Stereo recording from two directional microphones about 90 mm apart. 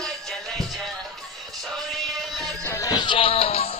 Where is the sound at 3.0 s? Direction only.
70° left (ahead or behind); by 3.7 s 90° left.